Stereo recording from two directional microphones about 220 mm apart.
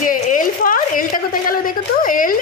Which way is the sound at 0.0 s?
35° left (ahead or behind).